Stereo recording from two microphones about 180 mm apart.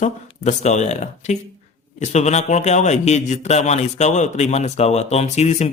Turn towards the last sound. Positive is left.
turn(degrees=35)  # may be behind; listen again after turning